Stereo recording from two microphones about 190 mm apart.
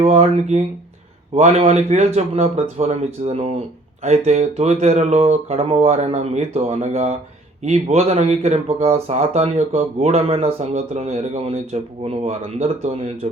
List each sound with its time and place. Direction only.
0.0 s speech: 35° right (ahead or behind)